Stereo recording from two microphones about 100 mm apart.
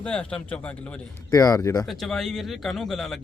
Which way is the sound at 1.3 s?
35° left (ahead or behind).